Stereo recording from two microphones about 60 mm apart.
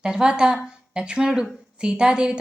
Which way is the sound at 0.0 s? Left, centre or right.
Centre.